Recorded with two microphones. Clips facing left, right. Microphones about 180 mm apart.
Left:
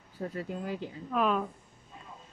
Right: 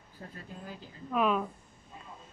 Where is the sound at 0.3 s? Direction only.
80° left.